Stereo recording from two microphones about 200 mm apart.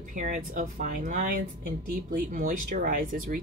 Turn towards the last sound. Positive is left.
turn(degrees=-45)  # may be behind; listen again after turning